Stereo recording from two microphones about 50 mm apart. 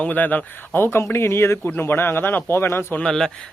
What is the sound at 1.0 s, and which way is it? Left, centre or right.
Speech, left.